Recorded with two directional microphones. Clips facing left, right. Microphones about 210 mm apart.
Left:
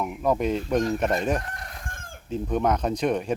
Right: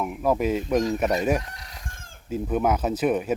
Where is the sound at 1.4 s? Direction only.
55° left (ahead or behind).